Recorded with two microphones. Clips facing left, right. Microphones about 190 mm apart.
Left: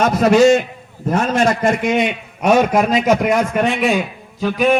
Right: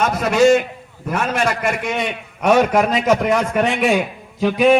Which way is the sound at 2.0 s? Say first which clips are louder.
Left 5 dB; 20° left (ahead or behind).